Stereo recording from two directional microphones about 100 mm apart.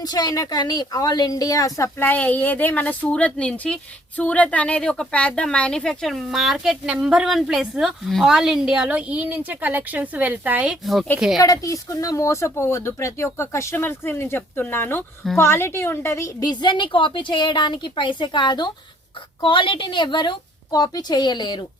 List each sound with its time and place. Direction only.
0.0 s a woman's voice: 40° left (ahead or behind)
2.0 s a woman's voice: 15° left (ahead or behind); by 10.8 s 15° right (ahead or behind)
11.3 s speech: 35° left (ahead or behind)
16.5 s a woman's voice: 50° left (ahead or behind)